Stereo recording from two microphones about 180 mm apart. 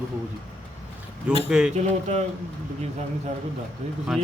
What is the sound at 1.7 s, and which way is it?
Speech, 40° right (ahead or behind).